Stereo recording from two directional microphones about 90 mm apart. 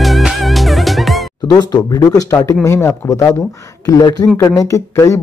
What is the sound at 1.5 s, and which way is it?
Speech, 50° left (ahead or behind).